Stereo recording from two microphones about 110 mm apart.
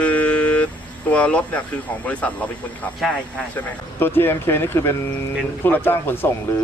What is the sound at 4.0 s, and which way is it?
Speech, 20° left (ahead or behind).